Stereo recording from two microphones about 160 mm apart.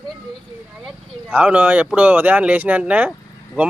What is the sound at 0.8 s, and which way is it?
Speech, 10° right (ahead or behind).